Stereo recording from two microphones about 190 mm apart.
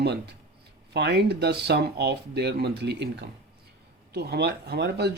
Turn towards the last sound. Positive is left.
turn(degrees=-60)  # may be behind; listen again after turning